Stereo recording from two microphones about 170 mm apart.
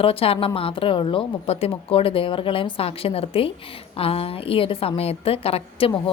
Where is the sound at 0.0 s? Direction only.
35° left (ahead or behind).